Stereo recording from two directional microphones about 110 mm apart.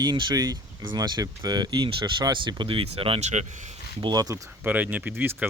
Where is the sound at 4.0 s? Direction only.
40° right (ahead or behind).